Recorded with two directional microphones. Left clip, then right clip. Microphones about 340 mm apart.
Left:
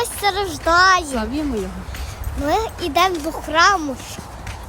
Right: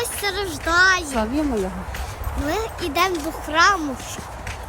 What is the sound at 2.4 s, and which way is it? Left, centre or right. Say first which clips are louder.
Speech: left 5 dB; centre.